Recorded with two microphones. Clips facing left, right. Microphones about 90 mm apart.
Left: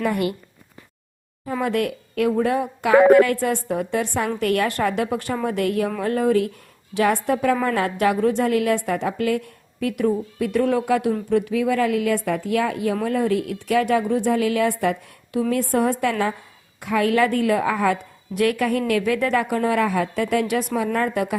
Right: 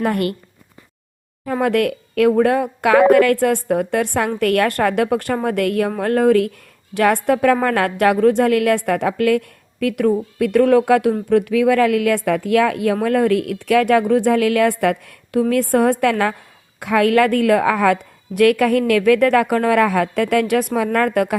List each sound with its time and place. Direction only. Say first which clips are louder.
0.0 s a woman's voice: right 3 dB; 60° right (ahead or behind)
1.5 s a woman's voice: right 5 dB; 65° right (ahead or behind)